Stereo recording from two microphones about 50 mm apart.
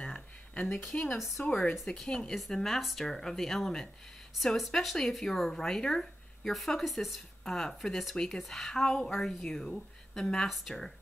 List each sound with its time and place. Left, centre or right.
0.0 s a sound: centre
0.9 s speech: left
1.6 s speech: centre
7.4 s speech: centre